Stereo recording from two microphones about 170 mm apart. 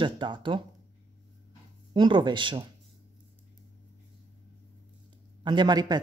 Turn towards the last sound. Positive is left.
turn(degrees=-25)  # may be behind; listen again after turning